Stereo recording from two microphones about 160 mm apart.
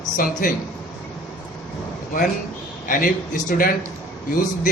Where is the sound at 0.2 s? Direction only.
60° left (ahead or behind).